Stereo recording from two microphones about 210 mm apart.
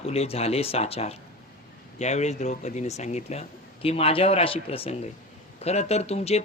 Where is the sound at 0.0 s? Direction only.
30° left (ahead or behind).